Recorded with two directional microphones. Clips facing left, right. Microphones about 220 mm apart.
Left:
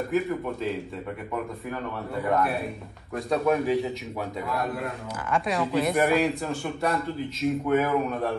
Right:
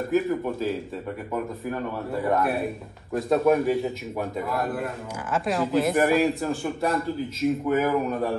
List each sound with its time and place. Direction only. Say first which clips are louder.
0.1 s a man's voice: right 5 dB; centre (ahead or behind)
3.2 s a man's voice: right 4 dB; centre (ahead or behind)